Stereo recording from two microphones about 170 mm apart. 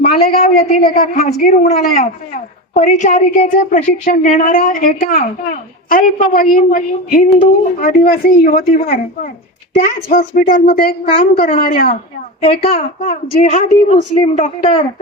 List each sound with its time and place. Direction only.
0.0 s a woman's voice: 45° left (ahead or behind); by 11.9 s 60° left (ahead or behind)
12.5 s a woman's voice: 35° left (ahead or behind)
13.0 s a woman's voice: 50° left (ahead or behind)